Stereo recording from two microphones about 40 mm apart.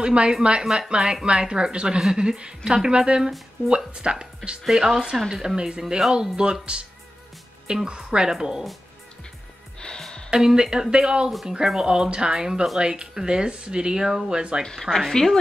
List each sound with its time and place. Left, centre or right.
0.0 s speech: right
4.6 s speech: centre
9.8 s music: centre
10.3 s speech: centre
14.9 s speech: centre